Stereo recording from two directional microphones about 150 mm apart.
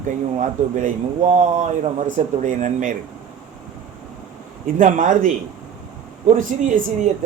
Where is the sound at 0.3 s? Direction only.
55° right (ahead or behind).